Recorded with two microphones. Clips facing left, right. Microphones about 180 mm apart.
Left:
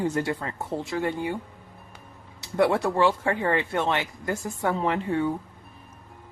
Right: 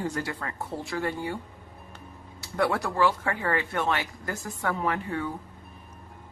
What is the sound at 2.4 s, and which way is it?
Speech, 25° left (ahead or behind).